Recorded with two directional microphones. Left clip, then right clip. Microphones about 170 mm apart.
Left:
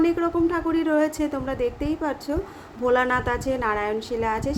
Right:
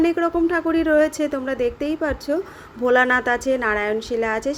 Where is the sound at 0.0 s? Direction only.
20° right (ahead or behind).